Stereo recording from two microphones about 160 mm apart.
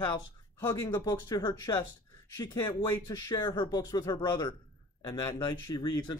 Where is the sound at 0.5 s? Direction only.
15° left (ahead or behind).